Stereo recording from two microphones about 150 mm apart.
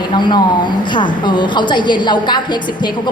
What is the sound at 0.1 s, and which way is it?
A woman's voice, 30° left (ahead or behind).